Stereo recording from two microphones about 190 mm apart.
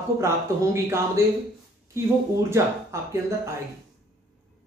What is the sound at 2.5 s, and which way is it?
Speech, 15° right (ahead or behind).